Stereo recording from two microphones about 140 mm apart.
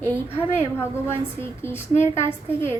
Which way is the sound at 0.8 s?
15° left (ahead or behind).